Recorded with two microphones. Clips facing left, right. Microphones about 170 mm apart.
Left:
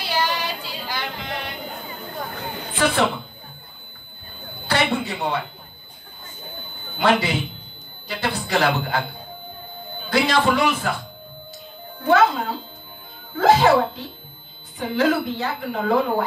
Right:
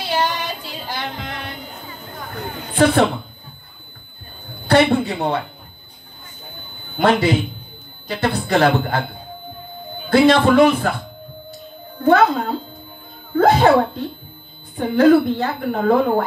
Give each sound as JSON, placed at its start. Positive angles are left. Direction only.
{"t": 0.0, "sound": "music", "side_deg": -50}
{"t": 2.7, "sound": "speech", "side_deg": -55}
{"t": 4.9, "sound": "speech", "side_deg": -55}
{"t": 7.0, "sound": "a woman's voice", "side_deg": -50}
{"t": 10.0, "sound": "a woman's voice", "side_deg": -55}
{"t": 12.0, "sound": "a woman's voice", "side_deg": -55}